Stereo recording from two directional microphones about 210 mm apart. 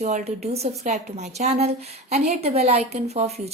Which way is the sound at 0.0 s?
30° right (ahead or behind).